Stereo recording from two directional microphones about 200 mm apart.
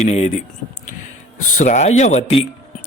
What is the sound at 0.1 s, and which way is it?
Speech, 35° left (ahead or behind).